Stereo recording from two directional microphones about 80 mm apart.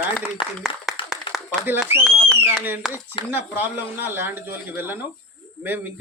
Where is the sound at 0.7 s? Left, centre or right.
Left.